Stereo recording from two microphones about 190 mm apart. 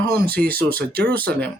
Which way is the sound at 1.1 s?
5° left (ahead or behind).